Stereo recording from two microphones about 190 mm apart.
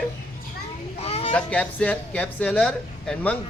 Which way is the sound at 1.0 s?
30° left (ahead or behind).